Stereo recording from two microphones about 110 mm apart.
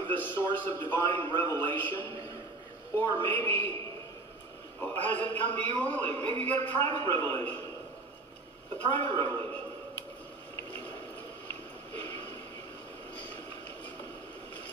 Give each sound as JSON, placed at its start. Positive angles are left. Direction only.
{"t": 0.0, "sound": "a man's voice", "side_deg": 15}
{"t": 4.9, "sound": "a man's voice", "side_deg": 15}
{"t": 9.2, "sound": "a sound", "side_deg": 20}